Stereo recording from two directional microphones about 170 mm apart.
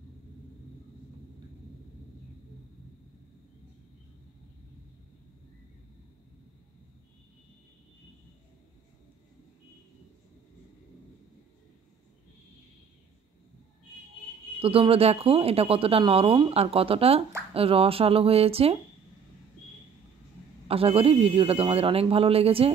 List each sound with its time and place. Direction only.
14.6 s speech: 35° right (ahead or behind)
20.6 s speech: 35° right (ahead or behind)